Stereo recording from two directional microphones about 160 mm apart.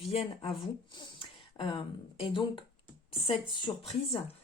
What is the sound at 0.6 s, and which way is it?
Speech, 30° left (ahead or behind).